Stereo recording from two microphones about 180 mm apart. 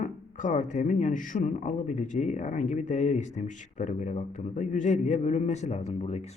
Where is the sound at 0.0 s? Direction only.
45° left (ahead or behind).